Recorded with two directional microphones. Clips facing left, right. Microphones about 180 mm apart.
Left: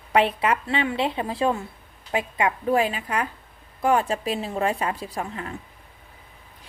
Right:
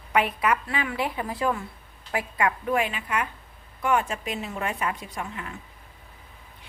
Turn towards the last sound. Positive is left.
turn(degrees=35)  # may be behind; listen again after turning